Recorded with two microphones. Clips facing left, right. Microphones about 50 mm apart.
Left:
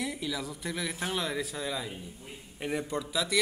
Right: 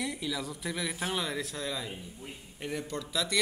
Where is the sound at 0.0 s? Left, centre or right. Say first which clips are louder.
Even; centre.